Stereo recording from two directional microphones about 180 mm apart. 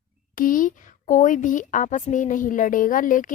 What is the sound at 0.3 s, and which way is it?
Speech, 50° left (ahead or behind).